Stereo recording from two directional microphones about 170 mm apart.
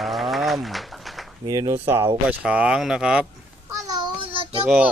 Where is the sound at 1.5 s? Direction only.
20° right (ahead or behind); by 3.3 s 5° right (ahead or behind).